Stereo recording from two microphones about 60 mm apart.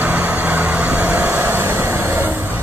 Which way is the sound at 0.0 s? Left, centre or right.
Right.